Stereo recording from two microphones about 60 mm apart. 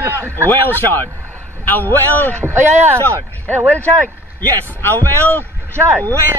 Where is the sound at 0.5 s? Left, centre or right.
Left.